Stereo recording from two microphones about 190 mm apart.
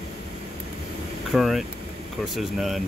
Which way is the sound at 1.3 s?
Centre (ahead or behind).